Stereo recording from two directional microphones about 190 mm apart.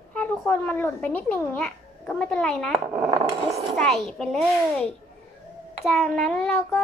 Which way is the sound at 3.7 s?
Centre (ahead or behind).